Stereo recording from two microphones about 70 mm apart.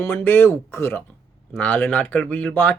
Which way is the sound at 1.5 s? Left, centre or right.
Left.